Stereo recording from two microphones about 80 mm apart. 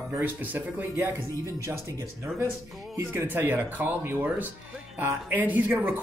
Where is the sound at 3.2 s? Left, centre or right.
Right.